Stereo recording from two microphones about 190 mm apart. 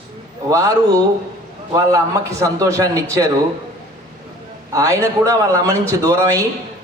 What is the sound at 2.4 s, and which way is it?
Speech, 15° right (ahead or behind).